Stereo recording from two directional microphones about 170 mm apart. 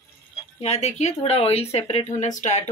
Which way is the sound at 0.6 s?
40° left (ahead or behind).